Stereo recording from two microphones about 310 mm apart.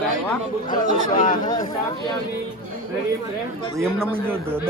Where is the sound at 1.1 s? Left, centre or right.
Left.